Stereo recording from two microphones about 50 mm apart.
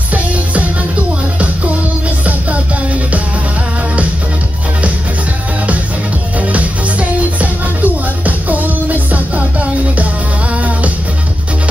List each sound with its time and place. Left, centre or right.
2.2 s music: right
6.4 s music: right